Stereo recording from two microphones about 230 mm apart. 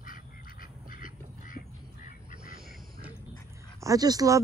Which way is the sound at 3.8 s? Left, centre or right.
Centre.